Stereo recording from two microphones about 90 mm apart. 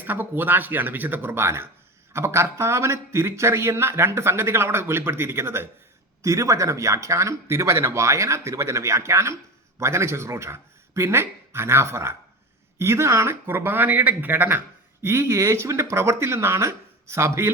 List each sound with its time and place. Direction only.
0.0 s speech: 20° right (ahead or behind)